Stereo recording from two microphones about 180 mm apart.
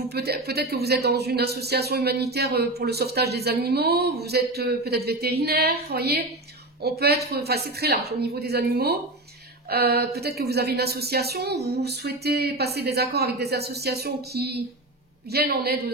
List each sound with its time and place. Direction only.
0.1 s speech: 60° right (ahead or behind)